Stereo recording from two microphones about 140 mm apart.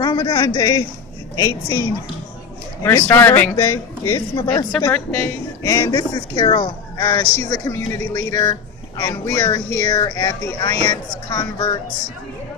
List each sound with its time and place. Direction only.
0.0 s speech: 30° left (ahead or behind)
3.1 s speech: 15° left (ahead or behind)
4.9 s speech: 10° left (ahead or behind)
5.6 s speech: 25° left (ahead or behind)
9.4 s speech: 30° left (ahead or behind)